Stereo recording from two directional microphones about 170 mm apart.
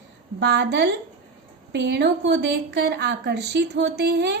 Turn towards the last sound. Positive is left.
turn(degrees=-85)